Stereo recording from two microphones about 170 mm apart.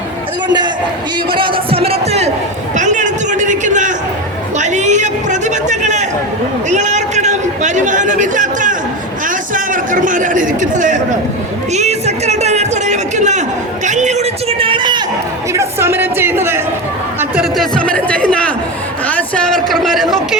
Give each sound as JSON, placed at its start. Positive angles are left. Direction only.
{"t": 0.4, "sound": "a man's voice", "side_deg": -25}
{"t": 2.7, "sound": "a sound", "side_deg": -45}
{"t": 4.5, "sound": "a man's voice", "side_deg": -45}
{"t": 15.5, "sound": "a man's voice", "side_deg": -15}